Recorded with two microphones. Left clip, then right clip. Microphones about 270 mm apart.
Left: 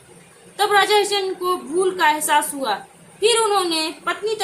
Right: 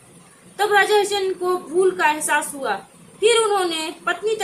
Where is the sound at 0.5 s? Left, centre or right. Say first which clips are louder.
Even; centre.